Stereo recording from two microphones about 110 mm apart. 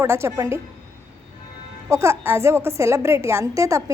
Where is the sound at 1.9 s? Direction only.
25° right (ahead or behind).